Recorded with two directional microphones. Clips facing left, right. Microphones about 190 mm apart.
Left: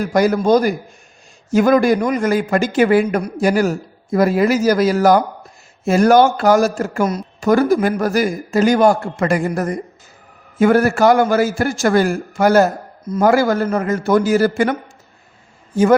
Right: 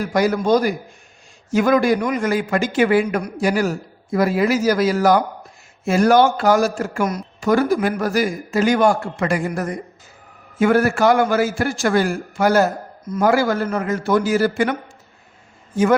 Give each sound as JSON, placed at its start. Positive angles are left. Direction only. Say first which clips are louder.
{"t": 0.1, "sound": "a man's voice", "louder": "left 3 dB", "side_deg": 45}
{"t": 15.7, "sound": "a man's voice", "louder": "left 3 dB", "side_deg": 35}